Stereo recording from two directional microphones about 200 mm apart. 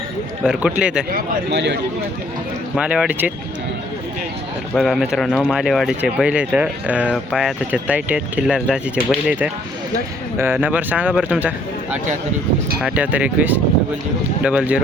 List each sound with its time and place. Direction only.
0.4 s speech: 5° right (ahead or behind)
1.1 s speech: 60° right (ahead or behind)
2.7 s speech: 5° right (ahead or behind)
4.7 s speech: centre (ahead or behind)